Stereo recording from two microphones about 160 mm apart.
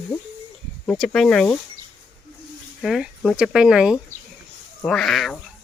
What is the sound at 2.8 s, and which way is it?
Speech, centre (ahead or behind).